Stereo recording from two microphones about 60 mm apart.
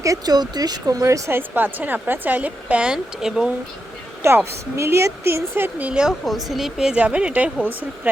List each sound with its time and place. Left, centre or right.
0.0 s speech: right
1.3 s a woman's voice: right; by 3.5 s centre
4.2 s a woman's voice: right
5.9 s speech: centre
6.2 s speech: centre
6.9 s a woman's voice: centre
7.7 s a woman's voice: right